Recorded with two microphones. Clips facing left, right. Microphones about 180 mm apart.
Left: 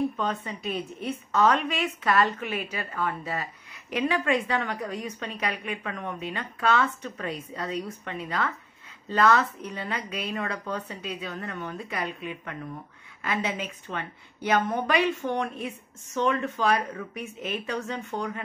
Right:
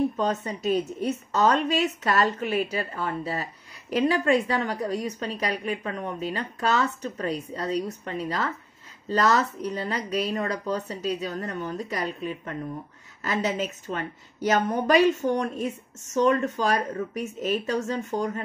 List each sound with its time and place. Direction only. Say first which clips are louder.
1.3 s a woman's voice: right 1 dB; 35° right (ahead or behind)